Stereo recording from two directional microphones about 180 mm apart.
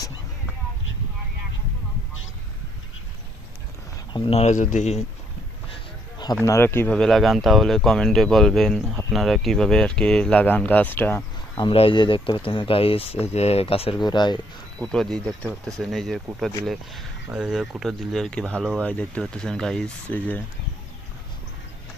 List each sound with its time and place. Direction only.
4.1 s speech: 35° left (ahead or behind)
5.7 s a sound: 25° left (ahead or behind)
6.4 s speech: 15° left (ahead or behind)
11.5 s speech: 30° left (ahead or behind)
14.8 s speech: 5° left (ahead or behind)